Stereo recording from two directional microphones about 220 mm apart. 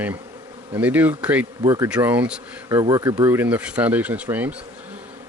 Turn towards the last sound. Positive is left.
turn(degrees=-5)  # may be behind; listen again after turning